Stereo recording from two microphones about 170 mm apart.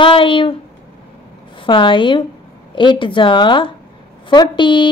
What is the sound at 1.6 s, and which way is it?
A woman's voice, 30° left (ahead or behind).